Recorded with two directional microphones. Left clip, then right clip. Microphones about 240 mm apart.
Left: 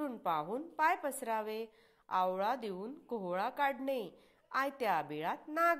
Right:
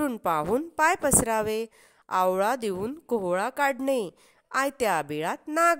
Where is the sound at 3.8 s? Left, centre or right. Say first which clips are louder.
Right 11 dB; right.